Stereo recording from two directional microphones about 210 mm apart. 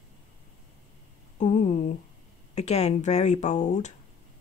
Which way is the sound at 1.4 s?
35° left (ahead or behind).